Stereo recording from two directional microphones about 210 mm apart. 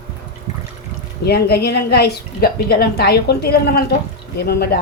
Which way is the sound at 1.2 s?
50° left (ahead or behind).